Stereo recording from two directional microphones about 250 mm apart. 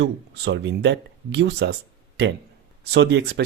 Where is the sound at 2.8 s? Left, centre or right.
Right.